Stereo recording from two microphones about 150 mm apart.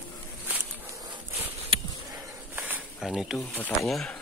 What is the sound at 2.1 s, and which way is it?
Snake, 10° right (ahead or behind).